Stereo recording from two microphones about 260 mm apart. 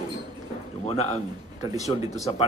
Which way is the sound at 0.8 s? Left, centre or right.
Left.